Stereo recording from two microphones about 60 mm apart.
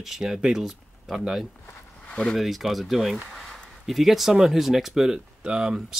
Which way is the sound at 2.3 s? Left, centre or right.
Centre.